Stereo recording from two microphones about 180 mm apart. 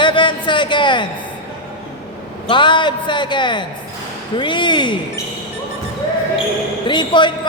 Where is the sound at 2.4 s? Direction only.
25° left (ahead or behind).